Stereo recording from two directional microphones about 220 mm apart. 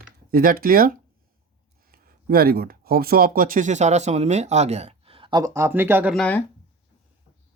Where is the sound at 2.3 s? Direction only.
45° right (ahead or behind); by 6.2 s 5° right (ahead or behind).